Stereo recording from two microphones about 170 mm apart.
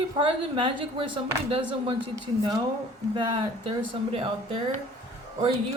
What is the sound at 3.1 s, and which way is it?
A woman's voice, 30° right (ahead or behind).